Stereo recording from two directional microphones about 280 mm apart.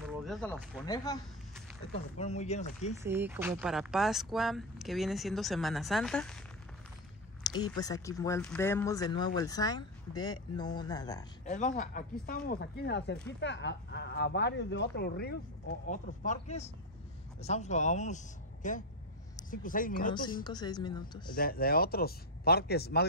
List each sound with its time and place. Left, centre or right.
0.0 s speech: centre
0.8 s speech: centre
2.1 s a man's voice: left
3.0 s speech: centre
7.4 s speech: centre
11.4 s a man's voice: left
20.4 s speech: centre
21.4 s speech: left